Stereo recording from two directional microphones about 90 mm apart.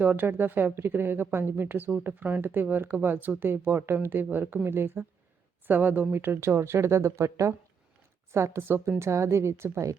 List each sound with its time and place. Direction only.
0.0 s a woman's voice: 20° right (ahead or behind)